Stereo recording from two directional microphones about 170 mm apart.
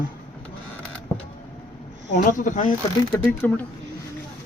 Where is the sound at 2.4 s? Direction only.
50° left (ahead or behind).